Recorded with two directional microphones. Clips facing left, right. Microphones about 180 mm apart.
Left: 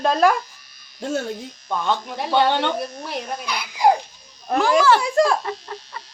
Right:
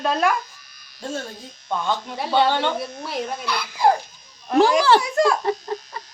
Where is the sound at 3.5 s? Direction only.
15° left (ahead or behind).